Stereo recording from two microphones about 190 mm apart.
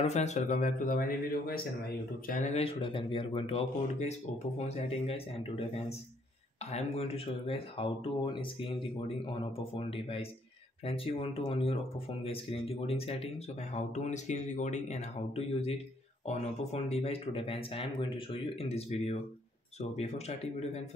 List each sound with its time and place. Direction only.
0.0 s speech: 35° left (ahead or behind)
9.8 s speech: 30° left (ahead or behind)